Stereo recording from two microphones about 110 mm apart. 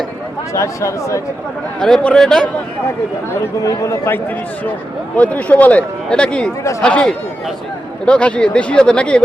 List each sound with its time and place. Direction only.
0.5 s speech: 25° left (ahead or behind)
1.8 s a man's voice: 5° left (ahead or behind)
3.6 s speech: 30° left (ahead or behind)
5.1 s speech: 15° left (ahead or behind)